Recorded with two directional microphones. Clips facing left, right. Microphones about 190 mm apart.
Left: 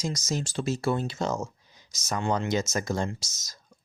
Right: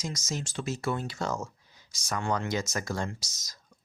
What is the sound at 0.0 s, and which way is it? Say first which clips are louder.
Speech: left 5 dB; 35° left (ahead or behind).